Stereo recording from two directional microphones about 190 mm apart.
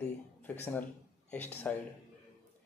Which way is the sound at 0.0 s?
10° left (ahead or behind).